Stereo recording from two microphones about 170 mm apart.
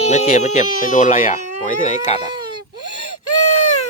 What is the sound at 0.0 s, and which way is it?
Speech, 40° left (ahead or behind).